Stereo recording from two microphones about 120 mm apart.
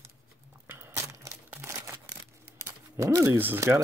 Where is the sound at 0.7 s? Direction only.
20° right (ahead or behind).